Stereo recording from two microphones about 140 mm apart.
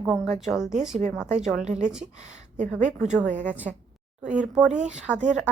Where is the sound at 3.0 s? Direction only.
5° right (ahead or behind).